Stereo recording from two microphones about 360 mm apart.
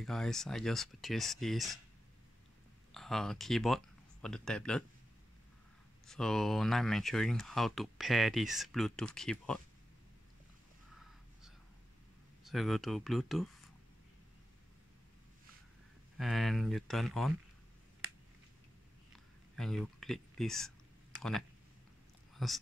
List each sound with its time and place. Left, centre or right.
0.0 s speech: centre
2.9 s speech: centre
6.0 s speech: centre
11.0 s a sound: centre
12.4 s speech: centre
16.2 s speech: centre
19.5 s speech: centre
22.3 s whispering: centre